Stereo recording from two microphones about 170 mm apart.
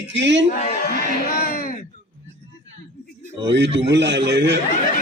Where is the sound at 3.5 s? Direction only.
90° right.